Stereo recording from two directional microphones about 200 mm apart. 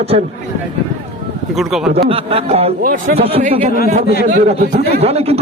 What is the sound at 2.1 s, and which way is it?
Speech, 30° right (ahead or behind).